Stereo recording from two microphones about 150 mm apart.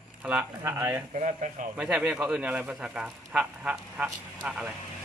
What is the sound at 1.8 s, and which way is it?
Speech, 5° right (ahead or behind).